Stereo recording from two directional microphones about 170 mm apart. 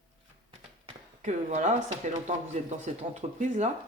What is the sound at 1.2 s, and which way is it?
Speech, 45° right (ahead or behind).